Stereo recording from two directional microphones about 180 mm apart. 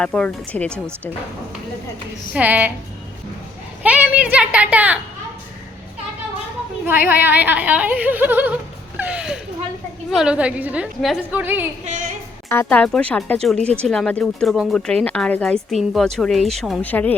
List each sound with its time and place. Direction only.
0.0 s speech: 5° left (ahead or behind)
0.7 s a woman's voice: 15° right (ahead or behind)
2.3 s a woman's voice: 10° right (ahead or behind)
3.8 s a woman's voice: 5° right (ahead or behind)
7.1 s a woman's voice: 10° right (ahead or behind)
11.9 s a sound: 45° right (ahead or behind)
12.5 s speech: 10° left (ahead or behind)